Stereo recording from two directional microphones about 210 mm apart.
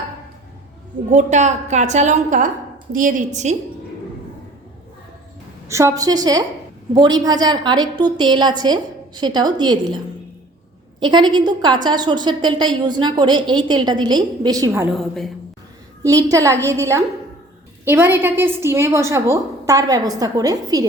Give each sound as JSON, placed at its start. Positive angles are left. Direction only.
{"t": 1.1, "sound": "a woman's voice", "side_deg": -35}
{"t": 5.6, "sound": "a woman's voice", "side_deg": -15}
{"t": 11.0, "sound": "a woman's voice", "side_deg": -20}
{"t": 14.9, "sound": "a woman's voice", "side_deg": 0}
{"t": 16.0, "sound": "a woman's voice", "side_deg": -15}